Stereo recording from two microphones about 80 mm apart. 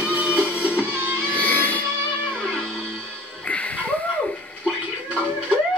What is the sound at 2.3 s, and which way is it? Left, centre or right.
Music, centre.